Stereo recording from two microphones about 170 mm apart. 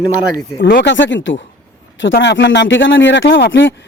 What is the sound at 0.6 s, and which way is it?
Speech, 75° left (ahead or behind).